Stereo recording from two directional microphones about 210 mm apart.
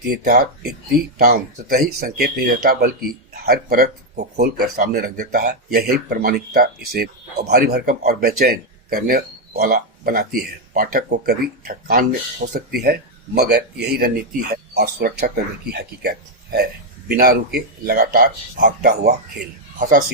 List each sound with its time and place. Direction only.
0.0 s speech: 45° right (ahead or behind)
17.1 s speech: 45° right (ahead or behind)